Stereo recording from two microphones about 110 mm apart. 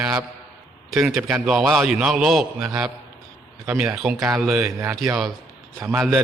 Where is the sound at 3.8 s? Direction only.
10° right (ahead or behind).